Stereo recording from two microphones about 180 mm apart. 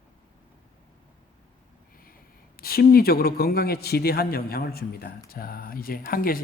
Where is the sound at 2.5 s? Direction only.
55° left (ahead or behind).